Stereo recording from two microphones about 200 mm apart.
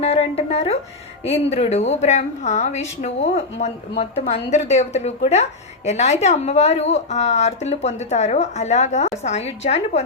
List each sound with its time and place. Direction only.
0.0 s a woman's voice: 30° left (ahead or behind)